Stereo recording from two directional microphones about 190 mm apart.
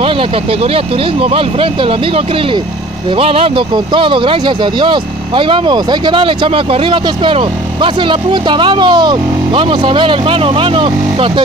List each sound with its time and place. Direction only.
0.0 s speech: 30° right (ahead or behind)